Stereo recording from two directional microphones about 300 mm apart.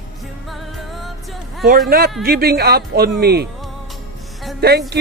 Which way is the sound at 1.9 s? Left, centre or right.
Right.